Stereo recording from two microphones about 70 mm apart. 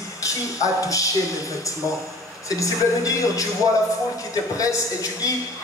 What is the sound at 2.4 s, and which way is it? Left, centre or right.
Speech, left.